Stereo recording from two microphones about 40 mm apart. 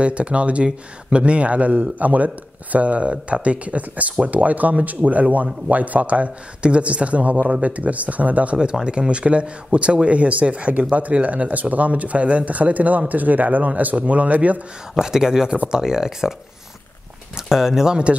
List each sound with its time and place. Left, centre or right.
0.0 s speech: right
8.8 s speech: right
15.0 s speech: centre
17.4 s speech: centre